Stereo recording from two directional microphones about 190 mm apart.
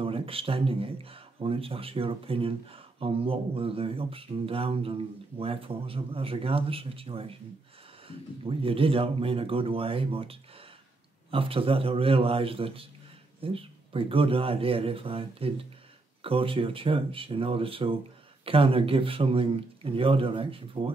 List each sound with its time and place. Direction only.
0.0 s speech: 30° right (ahead or behind)
8.5 s speech: 30° right (ahead or behind)